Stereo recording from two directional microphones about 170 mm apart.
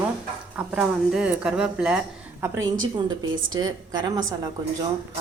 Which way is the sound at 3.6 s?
25° right (ahead or behind).